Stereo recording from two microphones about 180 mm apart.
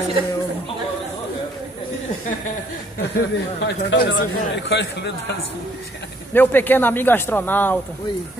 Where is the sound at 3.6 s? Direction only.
70° left (ahead or behind).